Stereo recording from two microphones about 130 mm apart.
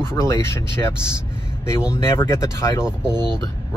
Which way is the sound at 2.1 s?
20° left (ahead or behind).